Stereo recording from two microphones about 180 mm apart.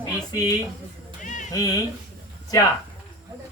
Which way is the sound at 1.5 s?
20° left (ahead or behind).